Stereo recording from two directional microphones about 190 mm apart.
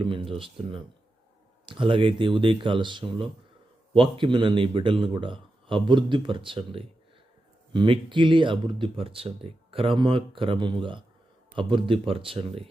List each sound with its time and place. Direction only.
0.0 s speech: 25° right (ahead or behind)